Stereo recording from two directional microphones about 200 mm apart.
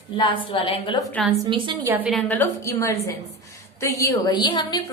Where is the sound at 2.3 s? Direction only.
10° left (ahead or behind).